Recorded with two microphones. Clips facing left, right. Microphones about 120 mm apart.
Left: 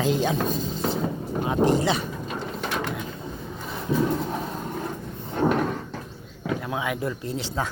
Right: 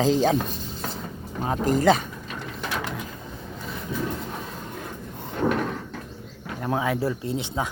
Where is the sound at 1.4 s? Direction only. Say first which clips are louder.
Right 1 dB; 40° right (ahead or behind).